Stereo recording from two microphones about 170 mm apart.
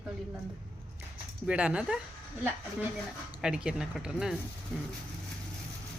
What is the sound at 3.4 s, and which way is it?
Speech, 5° right (ahead or behind).